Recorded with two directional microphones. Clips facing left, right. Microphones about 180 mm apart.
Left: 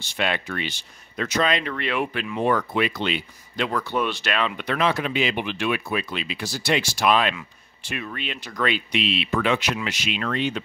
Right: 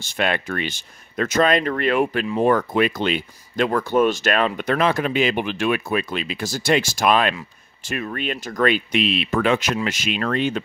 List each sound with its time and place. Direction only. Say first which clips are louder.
0.0 s speech: right 3 dB; 50° right (ahead or behind)